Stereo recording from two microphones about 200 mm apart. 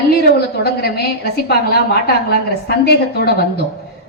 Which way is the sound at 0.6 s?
50° left (ahead or behind).